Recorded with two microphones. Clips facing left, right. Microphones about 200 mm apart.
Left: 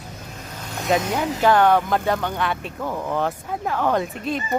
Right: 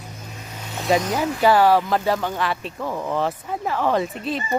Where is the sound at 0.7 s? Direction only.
Centre (ahead or behind).